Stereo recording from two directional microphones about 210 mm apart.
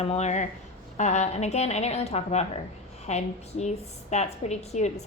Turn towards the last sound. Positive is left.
turn(degrees=30)  # may be behind; listen again after turning